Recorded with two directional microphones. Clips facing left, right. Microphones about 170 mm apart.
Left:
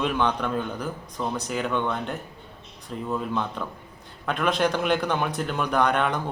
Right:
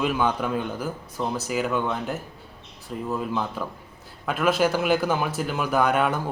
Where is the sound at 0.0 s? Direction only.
5° right (ahead or behind).